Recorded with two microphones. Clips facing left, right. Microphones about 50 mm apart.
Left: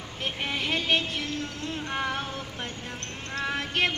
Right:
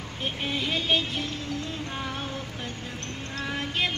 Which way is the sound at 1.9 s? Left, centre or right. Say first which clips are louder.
Left 3 dB; left.